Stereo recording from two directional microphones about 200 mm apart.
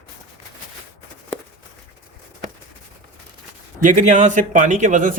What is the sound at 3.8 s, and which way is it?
Speech, 40° right (ahead or behind).